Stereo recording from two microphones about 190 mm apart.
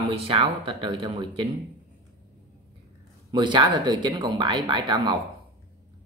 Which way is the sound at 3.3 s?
25° right (ahead or behind).